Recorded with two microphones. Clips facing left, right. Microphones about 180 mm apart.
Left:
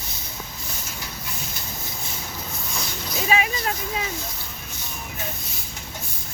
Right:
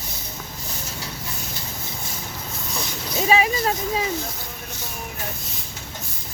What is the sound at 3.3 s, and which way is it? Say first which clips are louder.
Speech: right 4 dB; 35° right (ahead or behind).